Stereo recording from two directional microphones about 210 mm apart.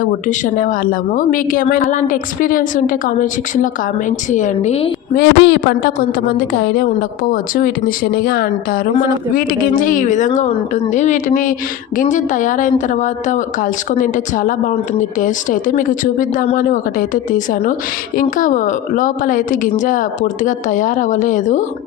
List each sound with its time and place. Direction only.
0.0 s speech: 40° left (ahead or behind)
5.1 s speech: 50° left (ahead or behind)